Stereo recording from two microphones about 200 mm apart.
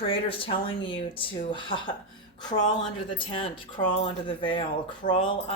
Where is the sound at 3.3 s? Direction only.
25° left (ahead or behind).